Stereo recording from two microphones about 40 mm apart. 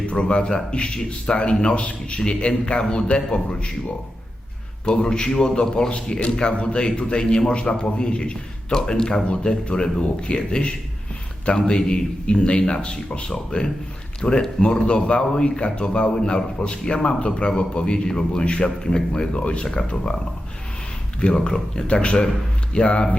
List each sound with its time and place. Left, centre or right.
0.1 s a man's voice: left
1.6 s a man's voice: left
4.9 s a man's voice: left
18.4 s a man's voice: left
18.8 s a man's voice: centre
21.2 s a man's voice: left